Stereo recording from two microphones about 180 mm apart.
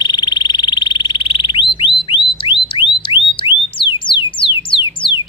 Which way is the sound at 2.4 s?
30° left (ahead or behind).